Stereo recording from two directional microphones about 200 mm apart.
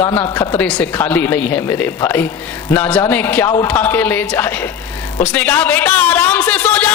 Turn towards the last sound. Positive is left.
turn(degrees=5)  # may be behind; listen again after turning